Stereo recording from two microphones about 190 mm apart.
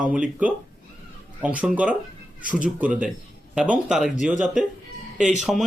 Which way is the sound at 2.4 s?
45° right (ahead or behind).